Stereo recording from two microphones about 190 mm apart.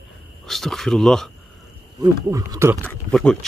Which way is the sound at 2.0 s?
20° right (ahead or behind).